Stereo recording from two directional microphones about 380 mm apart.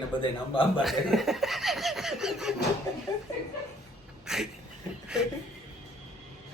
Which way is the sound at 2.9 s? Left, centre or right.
Centre.